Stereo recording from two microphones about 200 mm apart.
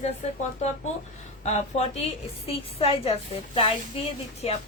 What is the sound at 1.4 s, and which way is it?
A woman's voice, 30° left (ahead or behind).